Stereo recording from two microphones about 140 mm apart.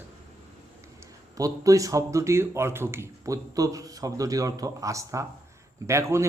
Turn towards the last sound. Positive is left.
turn(degrees=-20)  # may be behind; listen again after turning